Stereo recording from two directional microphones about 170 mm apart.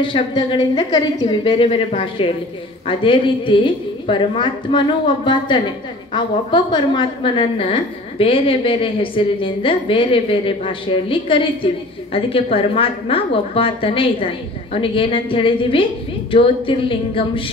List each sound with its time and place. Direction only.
0.0 s a man's voice: 30° left (ahead or behind)